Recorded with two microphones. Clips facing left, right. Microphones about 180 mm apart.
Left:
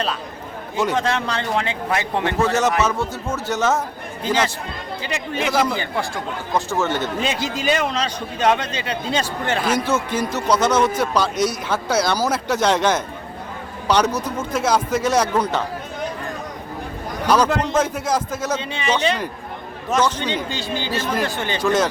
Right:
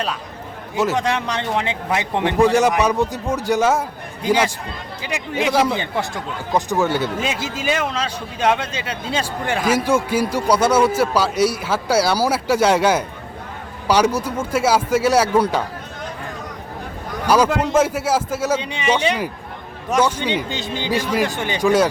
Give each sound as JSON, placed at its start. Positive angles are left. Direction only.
{"t": 0.9, "sound": "a man's voice", "side_deg": -15}
{"t": 17.2, "sound": "a man's voice", "side_deg": -10}